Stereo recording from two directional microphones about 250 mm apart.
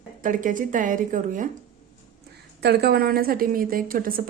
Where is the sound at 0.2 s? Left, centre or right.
Right.